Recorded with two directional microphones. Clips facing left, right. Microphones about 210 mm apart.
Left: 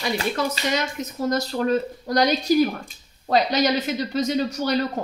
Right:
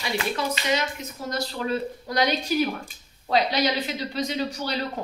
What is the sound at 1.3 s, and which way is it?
Speech, 45° left (ahead or behind).